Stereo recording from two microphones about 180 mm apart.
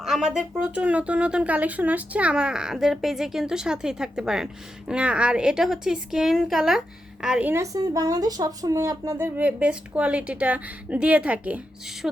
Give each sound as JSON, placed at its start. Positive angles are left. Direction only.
{"t": 0.0, "sound": "a woman's voice", "side_deg": -5}